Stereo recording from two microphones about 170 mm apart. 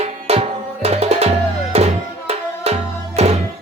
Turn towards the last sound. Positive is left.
turn(degrees=-40)  # may be behind; listen again after turning